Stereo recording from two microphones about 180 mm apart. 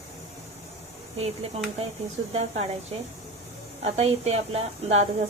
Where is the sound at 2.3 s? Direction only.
35° right (ahead or behind).